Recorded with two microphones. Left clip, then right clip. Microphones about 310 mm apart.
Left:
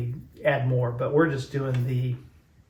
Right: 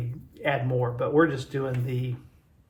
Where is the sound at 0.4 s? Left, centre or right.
Right.